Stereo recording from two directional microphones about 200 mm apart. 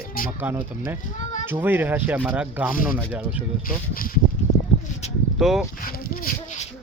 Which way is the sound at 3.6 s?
45° left (ahead or behind).